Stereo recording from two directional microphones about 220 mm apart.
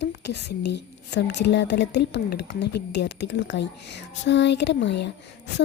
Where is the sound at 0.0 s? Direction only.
50° left (ahead or behind).